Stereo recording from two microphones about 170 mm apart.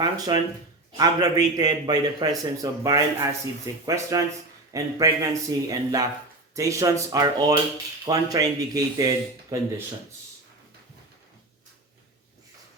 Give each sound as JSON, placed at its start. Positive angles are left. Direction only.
{"t": 0.0, "sound": "a man's voice", "side_deg": -25}